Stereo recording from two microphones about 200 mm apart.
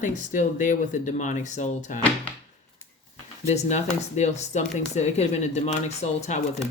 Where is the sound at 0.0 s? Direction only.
40° left (ahead or behind).